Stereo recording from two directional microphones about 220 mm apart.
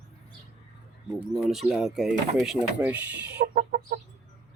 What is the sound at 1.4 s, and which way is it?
Speech, centre (ahead or behind).